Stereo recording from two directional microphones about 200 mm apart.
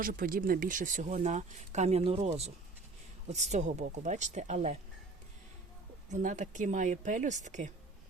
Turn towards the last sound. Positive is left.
turn(degrees=-40)  # may be behind; listen again after turning